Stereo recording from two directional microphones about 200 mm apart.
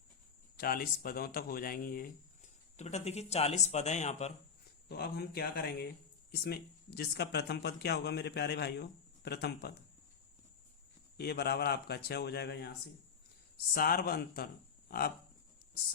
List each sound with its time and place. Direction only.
0.5 s speech: 45° left (ahead or behind)
4.9 s speech: 50° left (ahead or behind)
11.2 s speech: 55° left (ahead or behind)
13.7 s speech: 45° left (ahead or behind)